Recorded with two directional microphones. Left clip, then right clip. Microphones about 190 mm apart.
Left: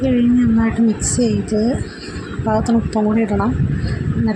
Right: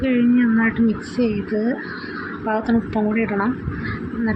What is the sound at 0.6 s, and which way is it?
Speech, 35° left (ahead or behind).